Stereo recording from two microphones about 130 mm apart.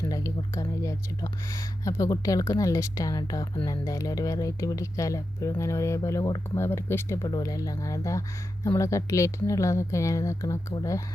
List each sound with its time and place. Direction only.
0.0 s speech: 25° left (ahead or behind)
6.6 s speech: 20° left (ahead or behind)